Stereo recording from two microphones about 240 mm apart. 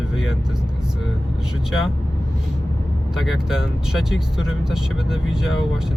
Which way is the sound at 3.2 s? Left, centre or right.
Centre.